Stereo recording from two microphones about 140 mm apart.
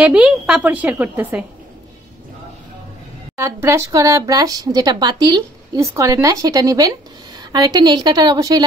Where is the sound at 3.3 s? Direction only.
20° right (ahead or behind).